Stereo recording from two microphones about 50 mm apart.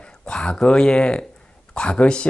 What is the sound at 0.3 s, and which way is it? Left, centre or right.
Speech, centre.